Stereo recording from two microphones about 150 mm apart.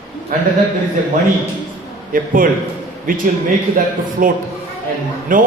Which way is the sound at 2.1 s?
65° right (ahead or behind).